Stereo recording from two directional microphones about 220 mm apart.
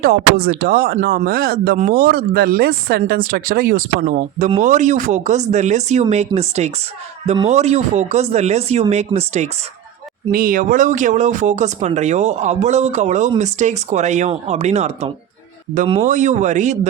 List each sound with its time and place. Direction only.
0.0 s speech: 40° right (ahead or behind)